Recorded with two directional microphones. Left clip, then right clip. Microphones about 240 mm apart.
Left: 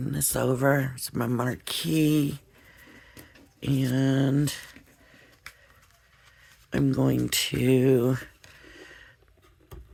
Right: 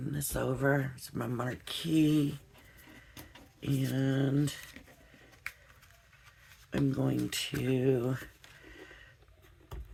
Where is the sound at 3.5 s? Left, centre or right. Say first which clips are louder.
Left 7 dB; left.